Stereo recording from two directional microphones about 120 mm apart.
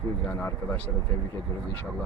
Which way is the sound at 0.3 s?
15° left (ahead or behind).